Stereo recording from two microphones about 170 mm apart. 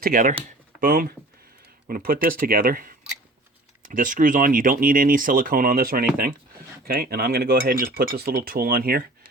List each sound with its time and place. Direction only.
0.0 s speech: 55° right (ahead or behind)